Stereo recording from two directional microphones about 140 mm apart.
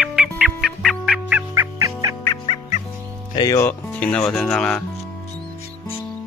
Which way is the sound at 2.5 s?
55° left (ahead or behind).